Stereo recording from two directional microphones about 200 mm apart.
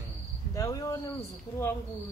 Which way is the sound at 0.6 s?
15° left (ahead or behind).